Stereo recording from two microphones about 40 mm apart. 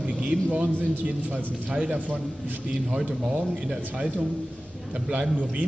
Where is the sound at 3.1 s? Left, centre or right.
Right.